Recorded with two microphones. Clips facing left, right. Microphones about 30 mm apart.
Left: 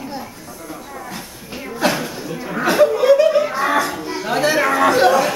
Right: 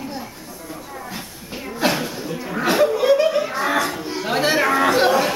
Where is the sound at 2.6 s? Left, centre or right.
Centre.